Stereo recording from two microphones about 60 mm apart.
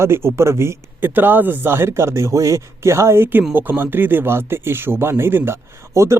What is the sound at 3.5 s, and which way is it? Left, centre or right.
Speech, right.